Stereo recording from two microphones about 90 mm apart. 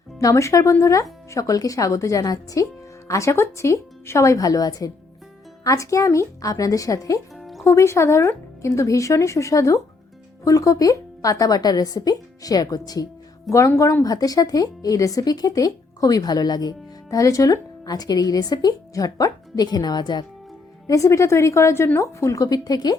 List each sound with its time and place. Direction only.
0.2 s speech: 35° left (ahead or behind)
7.3 s music: centre (ahead or behind)
7.6 s speech: 30° left (ahead or behind); by 20.2 s 50° left (ahead or behind)
20.8 s speech: 40° left (ahead or behind)